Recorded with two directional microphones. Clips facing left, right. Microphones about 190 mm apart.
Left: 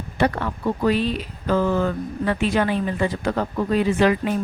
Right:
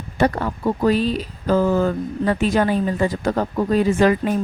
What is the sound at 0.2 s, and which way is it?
Speech, 40° right (ahead or behind).